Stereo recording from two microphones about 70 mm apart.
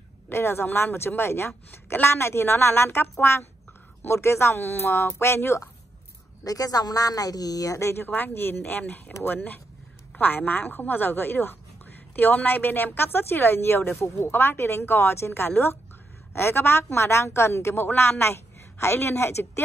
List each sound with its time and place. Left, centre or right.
0.3 s a woman's voice: left
6.4 s speech: left
7.8 s a woman's voice: left